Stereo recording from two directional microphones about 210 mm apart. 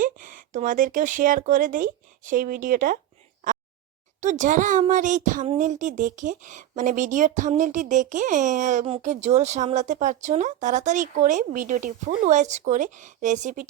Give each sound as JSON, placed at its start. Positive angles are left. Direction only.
{"t": 0.0, "sound": "speech", "side_deg": -40}
{"t": 4.2, "sound": "speech", "side_deg": -35}